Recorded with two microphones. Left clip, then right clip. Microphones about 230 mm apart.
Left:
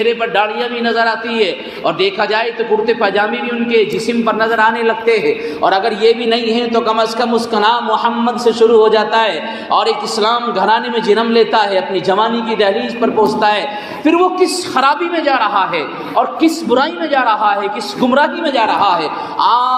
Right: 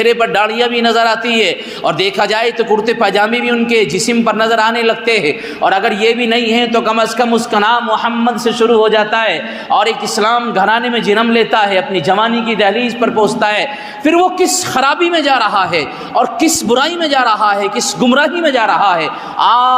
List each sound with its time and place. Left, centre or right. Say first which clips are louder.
0.0 s a man's voice: right 3 dB; right